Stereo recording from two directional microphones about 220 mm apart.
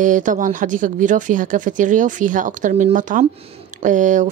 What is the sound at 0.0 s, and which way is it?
Speech, 35° right (ahead or behind).